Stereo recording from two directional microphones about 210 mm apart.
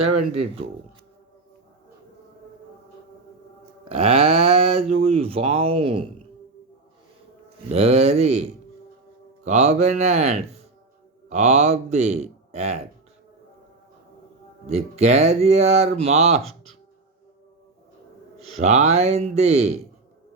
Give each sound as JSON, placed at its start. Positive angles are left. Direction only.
{"t": 0.3, "sound": "speech", "side_deg": -30}
{"t": 3.8, "sound": "speech", "side_deg": -30}
{"t": 7.7, "sound": "speech", "side_deg": -30}
{"t": 14.7, "sound": "speech", "side_deg": -30}
{"t": 18.3, "sound": "speech", "side_deg": -30}